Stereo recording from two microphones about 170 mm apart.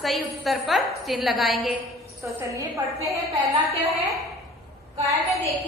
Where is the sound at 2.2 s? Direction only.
20° right (ahead or behind).